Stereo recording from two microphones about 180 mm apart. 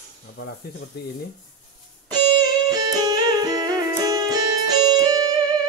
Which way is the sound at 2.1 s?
20° right (ahead or behind).